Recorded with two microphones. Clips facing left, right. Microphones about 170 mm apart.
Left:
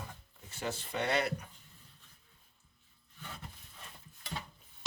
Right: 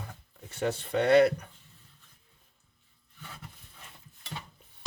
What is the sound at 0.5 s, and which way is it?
Speech, 60° right (ahead or behind).